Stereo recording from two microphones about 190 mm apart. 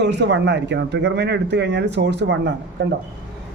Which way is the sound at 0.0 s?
65° right (ahead or behind).